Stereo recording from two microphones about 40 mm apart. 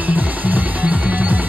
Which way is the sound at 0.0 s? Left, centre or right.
Right.